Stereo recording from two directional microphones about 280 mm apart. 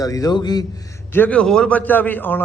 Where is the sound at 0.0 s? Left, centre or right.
Centre.